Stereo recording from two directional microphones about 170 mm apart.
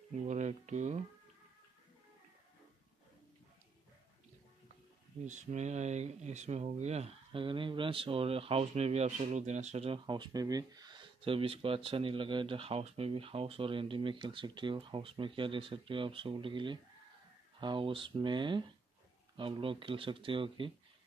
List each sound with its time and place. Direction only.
0.1 s speech: 45° right (ahead or behind)
5.2 s speech: 45° right (ahead or behind)